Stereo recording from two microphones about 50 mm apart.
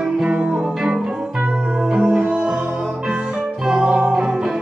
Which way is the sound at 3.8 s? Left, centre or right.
Centre.